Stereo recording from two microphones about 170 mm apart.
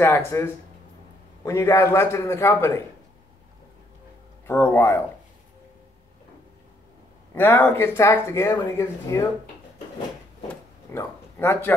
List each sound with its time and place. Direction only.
0.0 s speech: 15° left (ahead or behind)
4.5 s speech: 15° left (ahead or behind)
7.3 s speech: 10° left (ahead or behind)
10.5 s a sound: 15° left (ahead or behind)